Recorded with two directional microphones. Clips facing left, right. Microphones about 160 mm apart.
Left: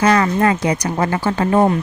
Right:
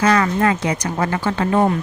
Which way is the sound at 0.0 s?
30° left (ahead or behind).